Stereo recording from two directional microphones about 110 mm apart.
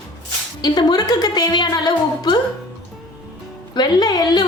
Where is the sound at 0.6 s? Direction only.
40° left (ahead or behind).